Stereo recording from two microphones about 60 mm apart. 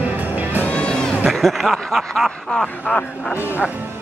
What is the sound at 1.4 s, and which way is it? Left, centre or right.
Speech, centre.